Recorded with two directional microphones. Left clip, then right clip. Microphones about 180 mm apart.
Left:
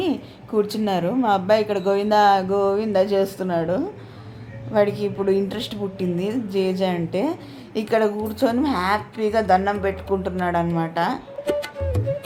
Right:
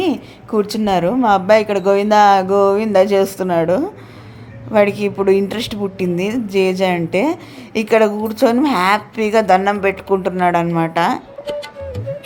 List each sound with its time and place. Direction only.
0.0 s a woman's voice: 25° right (ahead or behind)
12.1 s music: centre (ahead or behind)